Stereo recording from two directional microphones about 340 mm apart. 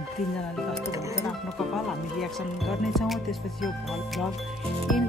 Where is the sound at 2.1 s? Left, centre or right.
Centre.